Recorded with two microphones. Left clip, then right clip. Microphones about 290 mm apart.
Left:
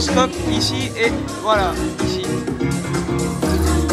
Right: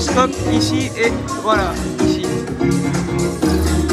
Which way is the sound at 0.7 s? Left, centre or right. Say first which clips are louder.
Right 2 dB; centre.